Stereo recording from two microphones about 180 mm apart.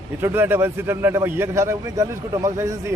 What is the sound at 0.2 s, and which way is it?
A man's voice, 10° right (ahead or behind).